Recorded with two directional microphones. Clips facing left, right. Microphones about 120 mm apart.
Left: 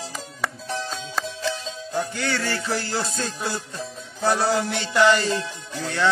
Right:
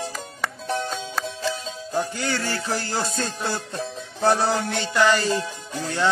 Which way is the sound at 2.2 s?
15° right (ahead or behind).